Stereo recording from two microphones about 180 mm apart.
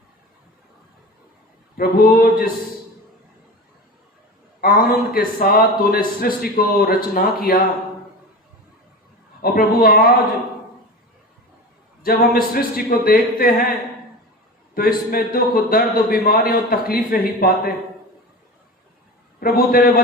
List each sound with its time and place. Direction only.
1.7 s a man's voice: 55° left (ahead or behind)
4.6 s a man's voice: 55° left (ahead or behind)
9.4 s a man's voice: 55° left (ahead or behind)
12.0 s a man's voice: 55° left (ahead or behind)
14.8 s a man's voice: 55° left (ahead or behind)
19.4 s a man's voice: 55° left (ahead or behind)